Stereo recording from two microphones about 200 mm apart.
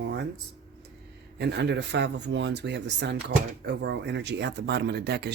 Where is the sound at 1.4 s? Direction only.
60° right (ahead or behind).